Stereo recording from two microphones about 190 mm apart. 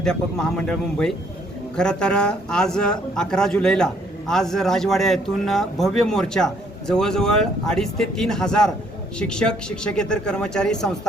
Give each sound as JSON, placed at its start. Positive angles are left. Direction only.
{"t": 0.0, "sound": "a man's voice", "side_deg": 5}